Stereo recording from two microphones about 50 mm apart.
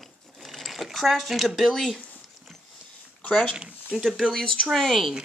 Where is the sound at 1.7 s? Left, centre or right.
Centre.